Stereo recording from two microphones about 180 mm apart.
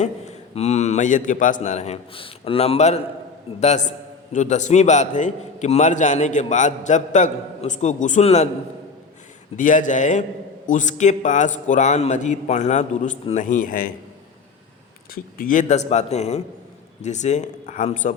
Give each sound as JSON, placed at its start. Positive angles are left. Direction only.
{"t": 0.0, "sound": "a man's voice", "side_deg": 40}
{"t": 9.6, "sound": "a man's voice", "side_deg": 45}
{"t": 15.1, "sound": "a man's voice", "side_deg": 50}